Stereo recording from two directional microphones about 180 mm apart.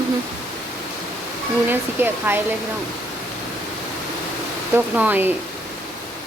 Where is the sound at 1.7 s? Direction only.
10° right (ahead or behind).